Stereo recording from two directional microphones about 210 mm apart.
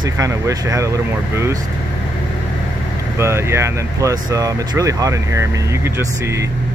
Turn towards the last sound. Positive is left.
turn(degrees=-15)  # may be behind; listen again after turning